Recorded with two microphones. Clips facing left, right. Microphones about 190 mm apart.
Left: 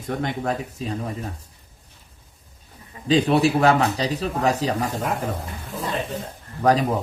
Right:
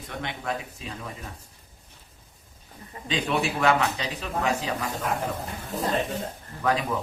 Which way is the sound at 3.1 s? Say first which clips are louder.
Left 9 dB; 35° left (ahead or behind).